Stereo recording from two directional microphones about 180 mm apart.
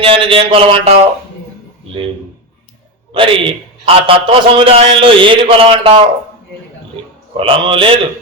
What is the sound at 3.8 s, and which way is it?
A man's voice, 30° right (ahead or behind).